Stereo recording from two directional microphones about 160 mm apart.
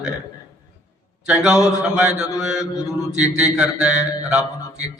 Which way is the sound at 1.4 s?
5° right (ahead or behind).